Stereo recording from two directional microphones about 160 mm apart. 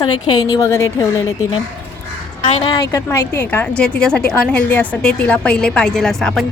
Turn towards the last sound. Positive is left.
turn(degrees=5)  # may be behind; listen again after turning